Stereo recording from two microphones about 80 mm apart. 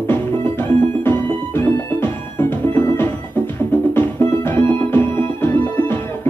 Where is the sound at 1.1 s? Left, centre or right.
Left.